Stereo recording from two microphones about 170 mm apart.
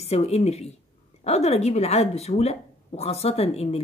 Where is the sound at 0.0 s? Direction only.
40° left (ahead or behind).